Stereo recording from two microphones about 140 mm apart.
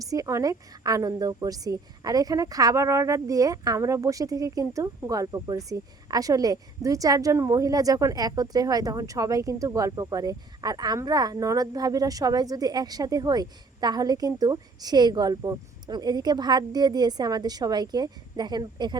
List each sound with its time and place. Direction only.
0.0 s a woman's voice: 25° right (ahead or behind)